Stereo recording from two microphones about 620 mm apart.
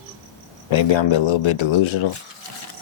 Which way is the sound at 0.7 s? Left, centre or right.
Left.